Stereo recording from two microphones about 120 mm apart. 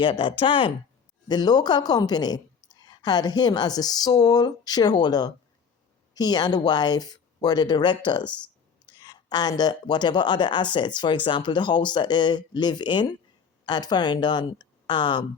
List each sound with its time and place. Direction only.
0.0 s speech: 45° left (ahead or behind)
1.3 s a woman's voice: 35° left (ahead or behind)